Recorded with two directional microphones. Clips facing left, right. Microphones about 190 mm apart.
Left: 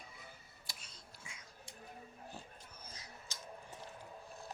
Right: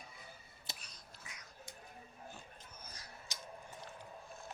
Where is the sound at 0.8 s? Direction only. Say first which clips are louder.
Even; 25° left (ahead or behind).